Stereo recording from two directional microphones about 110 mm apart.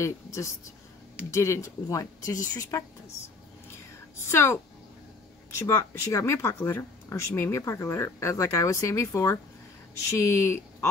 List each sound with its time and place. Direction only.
0.0 s a woman's voice: 30° left (ahead or behind)
4.3 s speech: 25° left (ahead or behind)